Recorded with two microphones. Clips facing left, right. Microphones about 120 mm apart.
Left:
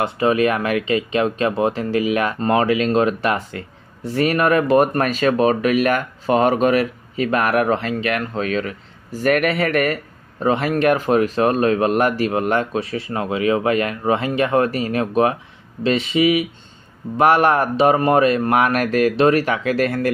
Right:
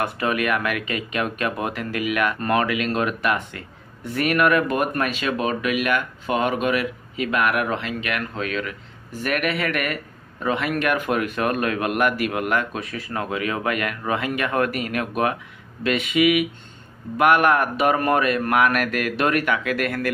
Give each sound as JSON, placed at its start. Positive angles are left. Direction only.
{"t": 0.0, "sound": "speech", "side_deg": 30}